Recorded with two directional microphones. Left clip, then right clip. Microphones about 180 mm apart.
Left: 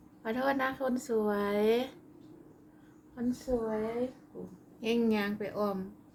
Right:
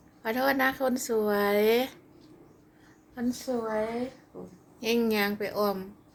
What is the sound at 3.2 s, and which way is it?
Speech, 15° right (ahead or behind).